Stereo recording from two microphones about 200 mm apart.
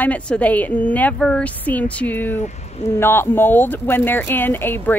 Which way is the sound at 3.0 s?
10° left (ahead or behind).